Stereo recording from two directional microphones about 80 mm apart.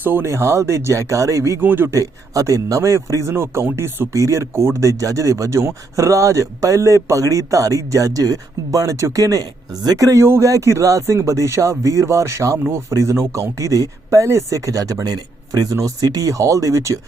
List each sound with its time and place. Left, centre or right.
0.0 s speech: right
1.6 s speech: right
1.9 s speech: right
4.1 s speech: right